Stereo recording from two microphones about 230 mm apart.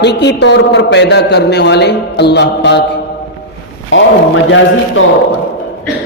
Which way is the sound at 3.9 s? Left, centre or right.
Left.